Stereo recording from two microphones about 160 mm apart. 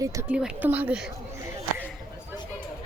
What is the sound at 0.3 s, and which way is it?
Speech, 10° right (ahead or behind).